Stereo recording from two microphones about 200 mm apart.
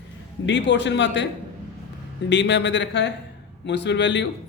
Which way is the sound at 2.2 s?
65° left (ahead or behind).